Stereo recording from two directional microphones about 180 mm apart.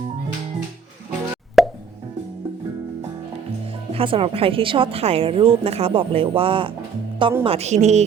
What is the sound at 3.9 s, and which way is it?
A woman's voice, 30° right (ahead or behind).